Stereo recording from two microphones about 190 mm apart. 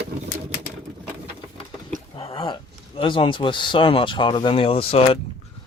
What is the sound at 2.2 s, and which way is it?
Speech, 30° left (ahead or behind).